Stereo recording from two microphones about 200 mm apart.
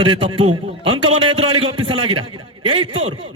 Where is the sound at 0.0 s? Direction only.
25° right (ahead or behind).